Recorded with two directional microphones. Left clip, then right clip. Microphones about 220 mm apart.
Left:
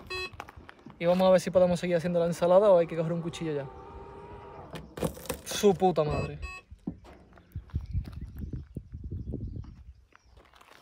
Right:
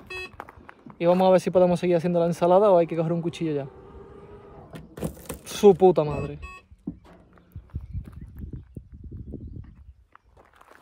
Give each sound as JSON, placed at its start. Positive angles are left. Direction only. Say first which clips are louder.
{"t": 0.1, "sound": "beep", "louder": "right 1 dB", "side_deg": 0}
{"t": 0.9, "sound": "speech", "louder": "right 4 dB", "side_deg": -30}
{"t": 4.7, "sound": "a sound", "louder": "left 1 dB", "side_deg": 10}
{"t": 5.4, "sound": "speech", "louder": "right 8 dB", "side_deg": -30}
{"t": 6.4, "sound": "music", "louder": "even", "side_deg": 0}
{"t": 8.8, "sound": "horse", "louder": "even", "side_deg": -35}